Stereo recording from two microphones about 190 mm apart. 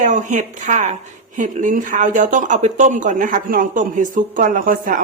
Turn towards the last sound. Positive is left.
turn(degrees=-45)  # may be behind; listen again after turning